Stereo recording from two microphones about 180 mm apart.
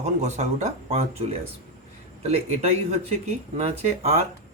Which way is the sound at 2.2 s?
35° right (ahead or behind).